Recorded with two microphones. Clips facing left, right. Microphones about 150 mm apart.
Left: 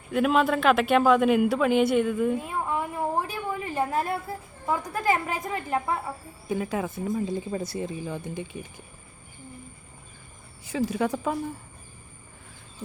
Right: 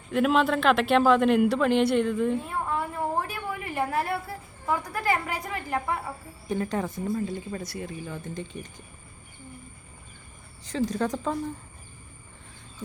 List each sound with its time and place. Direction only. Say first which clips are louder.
0.1 s a man's voice: even; centre (ahead or behind); by 6.0 s 20° left (ahead or behind)
6.5 s a woman's voice: even; 5° left (ahead or behind)
7.1 s speech: left 2 dB; 20° left (ahead or behind)
10.7 s a woman's voice: left 1 dB; 10° left (ahead or behind)